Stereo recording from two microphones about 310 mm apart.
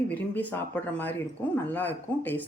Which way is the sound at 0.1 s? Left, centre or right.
Centre.